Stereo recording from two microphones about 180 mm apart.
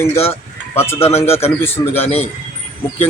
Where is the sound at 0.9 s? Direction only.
35° left (ahead or behind).